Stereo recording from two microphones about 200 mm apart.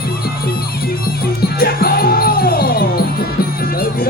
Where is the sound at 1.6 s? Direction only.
50° left (ahead or behind).